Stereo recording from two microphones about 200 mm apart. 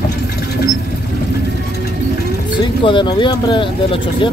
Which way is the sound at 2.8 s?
25° left (ahead or behind).